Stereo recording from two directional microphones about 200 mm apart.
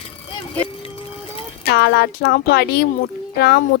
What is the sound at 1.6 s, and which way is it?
A woman's voice, 55° left (ahead or behind).